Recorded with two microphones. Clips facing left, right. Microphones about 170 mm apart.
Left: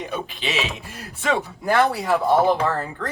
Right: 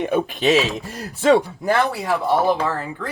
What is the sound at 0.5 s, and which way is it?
Speech, 40° right (ahead or behind).